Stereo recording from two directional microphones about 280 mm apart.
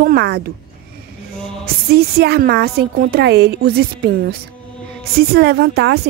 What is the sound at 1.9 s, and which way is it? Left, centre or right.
A woman's voice, right.